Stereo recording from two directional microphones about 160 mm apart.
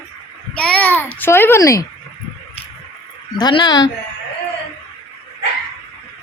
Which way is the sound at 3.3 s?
30° left (ahead or behind).